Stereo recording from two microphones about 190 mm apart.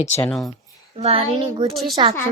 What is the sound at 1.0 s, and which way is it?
Speech, 30° right (ahead or behind).